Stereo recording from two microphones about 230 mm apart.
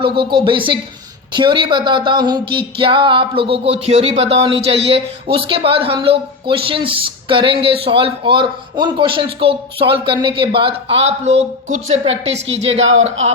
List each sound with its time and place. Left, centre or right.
0.0 s speech: right